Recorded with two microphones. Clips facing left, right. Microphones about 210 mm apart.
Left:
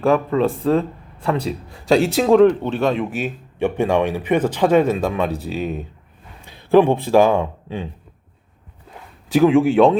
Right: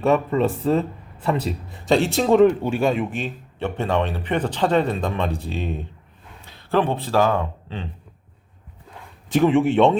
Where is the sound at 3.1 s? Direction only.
10° left (ahead or behind).